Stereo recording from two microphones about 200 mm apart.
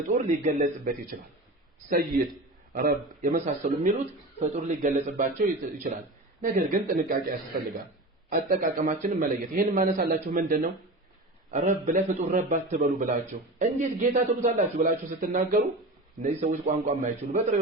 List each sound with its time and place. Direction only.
0.0 s a man's voice: 40° right (ahead or behind)
6.4 s a man's voice: 45° right (ahead or behind)